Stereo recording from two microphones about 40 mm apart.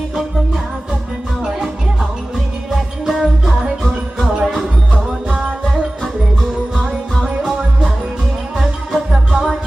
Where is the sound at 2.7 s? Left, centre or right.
Centre.